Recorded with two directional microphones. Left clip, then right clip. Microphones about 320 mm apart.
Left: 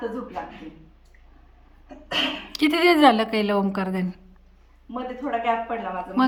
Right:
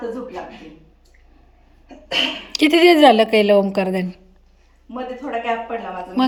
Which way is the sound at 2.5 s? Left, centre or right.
Centre.